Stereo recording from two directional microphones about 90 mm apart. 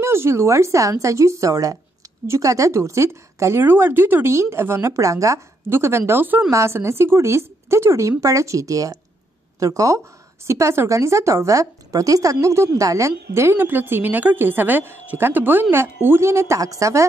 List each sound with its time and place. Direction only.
0.0 s a woman's voice: 30° right (ahead or behind)